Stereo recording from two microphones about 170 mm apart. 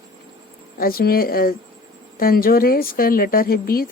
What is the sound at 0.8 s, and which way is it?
A woman's voice, 60° left (ahead or behind).